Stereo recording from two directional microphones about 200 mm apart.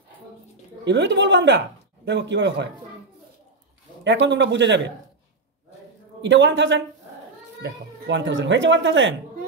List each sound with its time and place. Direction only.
0.8 s a man's voice: 65° right (ahead or behind)
4.0 s a man's voice: 65° right (ahead or behind)
6.2 s a man's voice: 65° right (ahead or behind)